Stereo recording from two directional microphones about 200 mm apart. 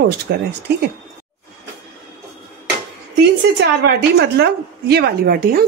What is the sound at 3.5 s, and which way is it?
A woman's voice, 55° right (ahead or behind).